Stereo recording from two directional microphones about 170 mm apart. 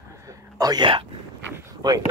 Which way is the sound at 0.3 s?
25° right (ahead or behind).